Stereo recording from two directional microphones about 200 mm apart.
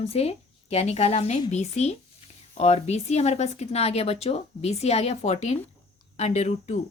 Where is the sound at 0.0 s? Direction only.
30° left (ahead or behind).